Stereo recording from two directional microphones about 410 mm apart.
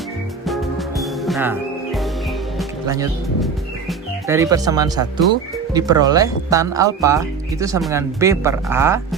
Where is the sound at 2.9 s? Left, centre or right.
Centre.